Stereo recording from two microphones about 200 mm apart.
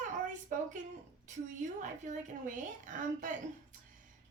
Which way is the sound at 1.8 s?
40° right (ahead or behind).